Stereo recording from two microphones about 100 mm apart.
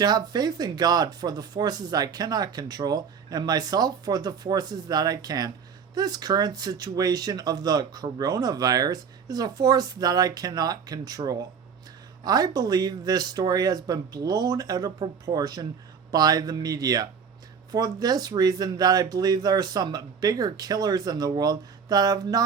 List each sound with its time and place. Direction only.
0.0 s speech: 45° right (ahead or behind)